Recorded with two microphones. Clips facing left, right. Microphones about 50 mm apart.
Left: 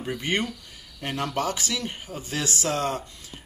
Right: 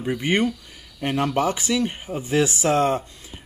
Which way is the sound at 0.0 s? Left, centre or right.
Centre.